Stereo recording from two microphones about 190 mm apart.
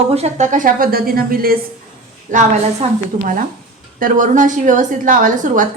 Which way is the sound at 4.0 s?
45° right (ahead or behind).